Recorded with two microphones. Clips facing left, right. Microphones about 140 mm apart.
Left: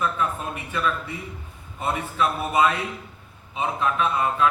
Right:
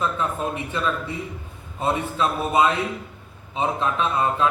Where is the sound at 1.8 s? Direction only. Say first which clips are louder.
Right 2 dB; 25° right (ahead or behind).